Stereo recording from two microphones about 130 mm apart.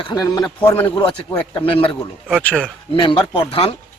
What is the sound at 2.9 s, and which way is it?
Speech, 40° left (ahead or behind).